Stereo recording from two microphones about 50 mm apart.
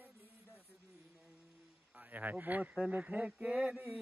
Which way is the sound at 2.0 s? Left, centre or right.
Right.